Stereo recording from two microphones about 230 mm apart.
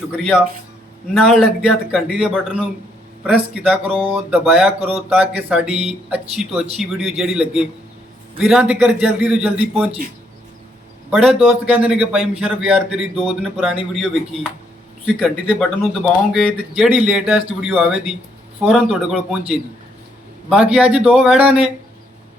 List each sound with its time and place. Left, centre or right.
1.1 s speech: centre
11.1 s speech: centre